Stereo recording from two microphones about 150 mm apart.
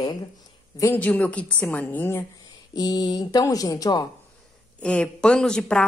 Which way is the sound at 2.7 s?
25° left (ahead or behind).